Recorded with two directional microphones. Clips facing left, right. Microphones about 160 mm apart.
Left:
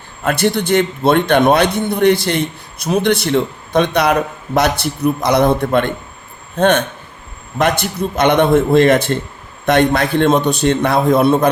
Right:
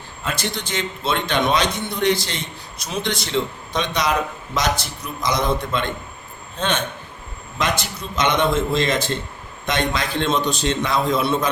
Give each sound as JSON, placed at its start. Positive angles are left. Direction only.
{"t": 0.2, "sound": "speech", "side_deg": 60}